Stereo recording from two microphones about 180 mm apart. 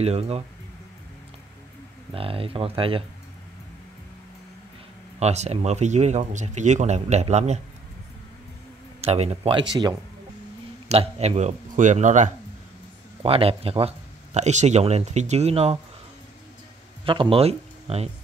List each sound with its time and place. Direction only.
0.0 s speech: 35° right (ahead or behind)
2.1 s speech: 30° right (ahead or behind)
5.2 s speech: 35° right (ahead or behind)
9.0 s speech: 35° right (ahead or behind)
10.9 s speech: 35° right (ahead or behind)
13.2 s speech: 30° right (ahead or behind)
17.0 s speech: 30° right (ahead or behind)